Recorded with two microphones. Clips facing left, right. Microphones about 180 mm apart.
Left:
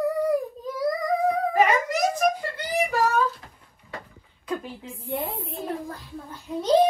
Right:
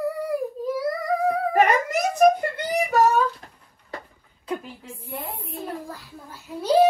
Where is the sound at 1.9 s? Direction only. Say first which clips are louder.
Right 5 dB; 60° right (ahead or behind).